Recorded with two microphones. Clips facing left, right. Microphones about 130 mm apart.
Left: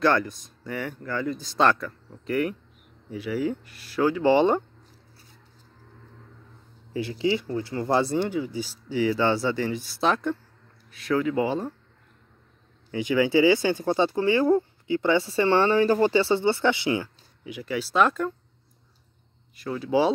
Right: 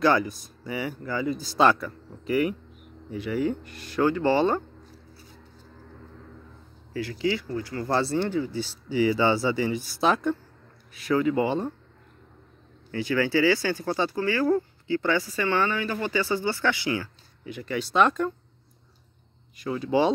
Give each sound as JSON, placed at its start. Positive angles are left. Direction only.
{"t": 0.0, "sound": "speech", "side_deg": -5}
{"t": 4.3, "sound": "speech", "side_deg": 15}
{"t": 6.9, "sound": "speech", "side_deg": 20}
{"t": 8.8, "sound": "speech", "side_deg": 0}
{"t": 12.9, "sound": "speech", "side_deg": 15}
{"t": 17.5, "sound": "speech", "side_deg": 5}
{"t": 19.5, "sound": "speech", "side_deg": 0}